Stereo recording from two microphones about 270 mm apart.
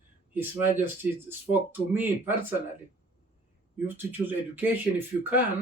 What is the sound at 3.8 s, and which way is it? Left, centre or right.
Speech, centre.